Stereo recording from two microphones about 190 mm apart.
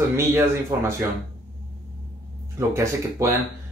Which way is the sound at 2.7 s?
15° right (ahead or behind).